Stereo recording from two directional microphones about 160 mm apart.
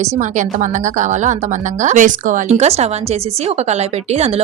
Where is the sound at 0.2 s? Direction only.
50° right (ahead or behind).